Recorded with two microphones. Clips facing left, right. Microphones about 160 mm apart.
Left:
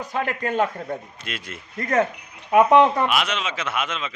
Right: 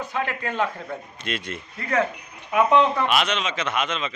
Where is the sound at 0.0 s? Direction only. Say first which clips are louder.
Left 2 dB; 40° left (ahead or behind).